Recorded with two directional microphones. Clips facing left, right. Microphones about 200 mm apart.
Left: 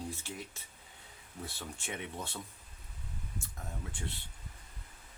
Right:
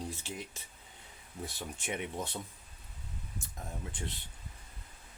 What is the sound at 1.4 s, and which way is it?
Speech, 15° right (ahead or behind).